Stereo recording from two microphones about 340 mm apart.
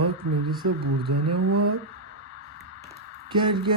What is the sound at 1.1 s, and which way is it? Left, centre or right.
Speech, right.